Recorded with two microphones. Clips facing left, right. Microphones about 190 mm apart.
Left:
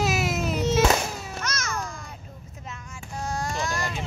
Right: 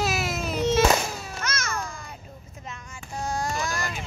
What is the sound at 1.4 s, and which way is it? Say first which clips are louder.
Babbling: even; centre (ahead or behind).